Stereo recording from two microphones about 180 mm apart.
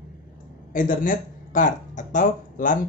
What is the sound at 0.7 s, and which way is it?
Speech, 50° left (ahead or behind).